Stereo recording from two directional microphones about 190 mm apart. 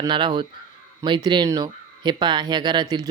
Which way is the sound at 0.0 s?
25° right (ahead or behind).